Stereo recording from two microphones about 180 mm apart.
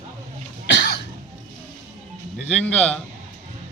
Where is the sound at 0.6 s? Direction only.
75° left (ahead or behind).